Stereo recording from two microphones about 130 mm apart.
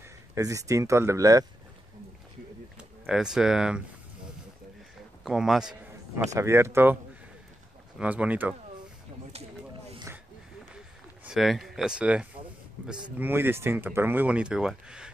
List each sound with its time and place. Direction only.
0.3 s speech: 25° right (ahead or behind)
2.8 s speech: 5° right (ahead or behind)
5.2 s a man's voice: 5° right (ahead or behind)
6.3 s speech: 20° right (ahead or behind)
8.0 s speech: 10° right (ahead or behind)
11.2 s speech: centre (ahead or behind)